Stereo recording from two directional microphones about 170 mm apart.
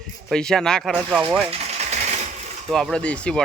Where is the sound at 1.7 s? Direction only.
40° right (ahead or behind).